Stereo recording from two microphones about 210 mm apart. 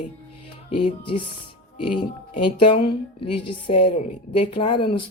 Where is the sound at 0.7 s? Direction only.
25° left (ahead or behind).